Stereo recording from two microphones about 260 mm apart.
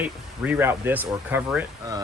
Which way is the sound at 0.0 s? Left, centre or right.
Centre.